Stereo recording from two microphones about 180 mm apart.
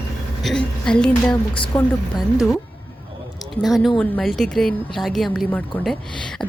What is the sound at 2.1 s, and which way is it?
Speech, centre (ahead or behind).